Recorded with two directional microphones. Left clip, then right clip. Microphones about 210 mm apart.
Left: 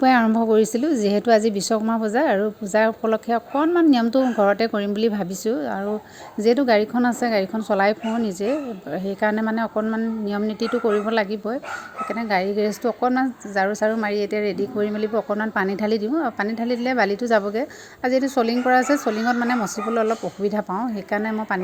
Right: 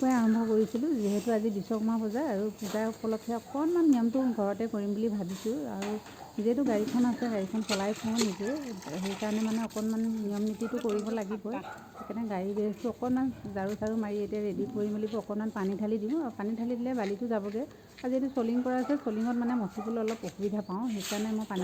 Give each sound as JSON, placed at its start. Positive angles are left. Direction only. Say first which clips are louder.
{"t": 0.0, "sound": "a woman's voice", "louder": "left 12 dB", "side_deg": 25}
{"t": 6.4, "sound": "a woman's voice", "louder": "left 12 dB", "side_deg": 20}
{"t": 9.2, "sound": "a woman's voice", "louder": "left 13 dB", "side_deg": 25}